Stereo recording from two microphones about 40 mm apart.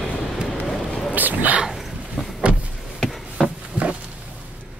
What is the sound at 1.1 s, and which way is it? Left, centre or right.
Speech, right.